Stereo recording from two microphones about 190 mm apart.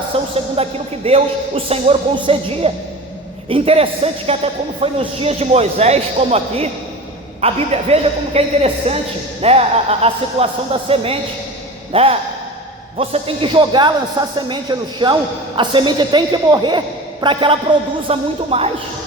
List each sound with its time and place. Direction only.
0.1 s speech: 30° right (ahead or behind)